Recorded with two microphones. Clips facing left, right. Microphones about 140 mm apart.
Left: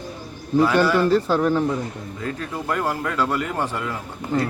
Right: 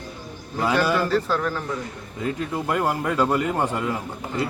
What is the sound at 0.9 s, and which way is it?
Speech, 30° left (ahead or behind).